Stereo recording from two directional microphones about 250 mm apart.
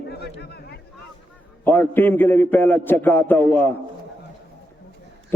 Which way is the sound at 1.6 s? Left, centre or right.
Centre.